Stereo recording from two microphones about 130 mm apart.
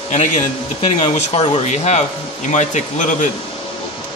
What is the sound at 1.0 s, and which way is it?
Speech, 60° left (ahead or behind).